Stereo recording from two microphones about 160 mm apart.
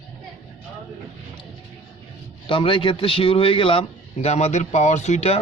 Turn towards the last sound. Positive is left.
turn(degrees=45)  # may be behind; listen again after turning